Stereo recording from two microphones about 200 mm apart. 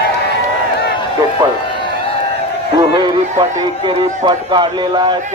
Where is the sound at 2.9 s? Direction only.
20° right (ahead or behind).